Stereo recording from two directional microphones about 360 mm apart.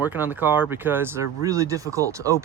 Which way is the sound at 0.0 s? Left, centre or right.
Centre.